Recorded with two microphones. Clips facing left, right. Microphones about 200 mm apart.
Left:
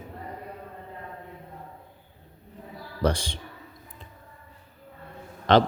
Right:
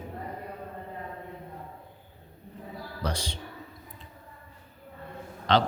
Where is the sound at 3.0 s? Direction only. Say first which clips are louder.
Left 8 dB; 50° left (ahead or behind).